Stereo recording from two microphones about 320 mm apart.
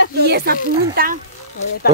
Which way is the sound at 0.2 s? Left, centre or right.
Right.